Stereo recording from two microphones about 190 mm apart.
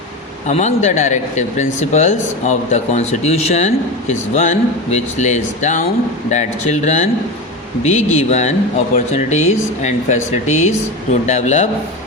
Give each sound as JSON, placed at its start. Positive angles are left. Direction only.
{"t": 0.4, "sound": "speech", "side_deg": 40}
{"t": 10.4, "sound": "speech", "side_deg": 90}
{"t": 11.3, "sound": "speech", "side_deg": 40}